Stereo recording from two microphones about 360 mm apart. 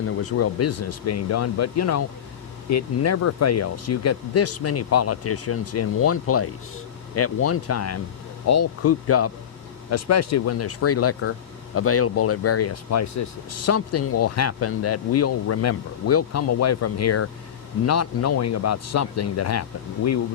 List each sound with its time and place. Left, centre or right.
0.2 s speech: left